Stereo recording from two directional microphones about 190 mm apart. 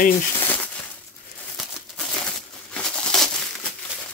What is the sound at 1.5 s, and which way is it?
Crumpling, centre (ahead or behind).